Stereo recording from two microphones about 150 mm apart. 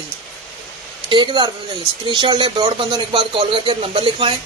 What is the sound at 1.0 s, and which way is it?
A woman's voice, 30° right (ahead or behind).